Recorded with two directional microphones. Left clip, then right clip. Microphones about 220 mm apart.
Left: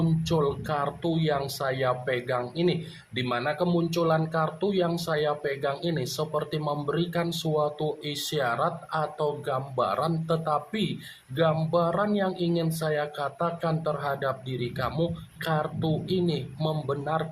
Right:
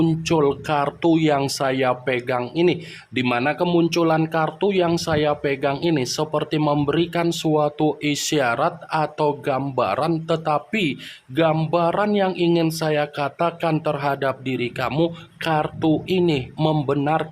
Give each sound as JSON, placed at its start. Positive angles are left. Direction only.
{"t": 0.2, "sound": "speech", "side_deg": -40}